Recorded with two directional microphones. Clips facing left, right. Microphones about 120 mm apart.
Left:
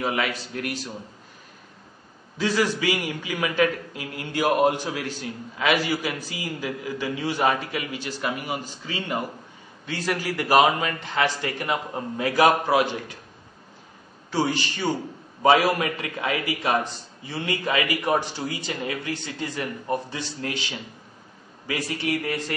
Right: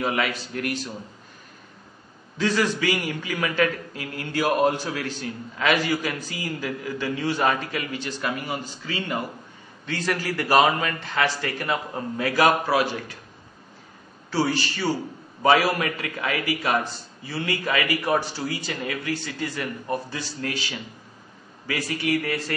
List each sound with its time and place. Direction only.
0.0 s a man's voice: centre (ahead or behind)
2.3 s a man's voice: 10° left (ahead or behind)
14.3 s a man's voice: 20° left (ahead or behind)
21.6 s a man's voice: 25° left (ahead or behind)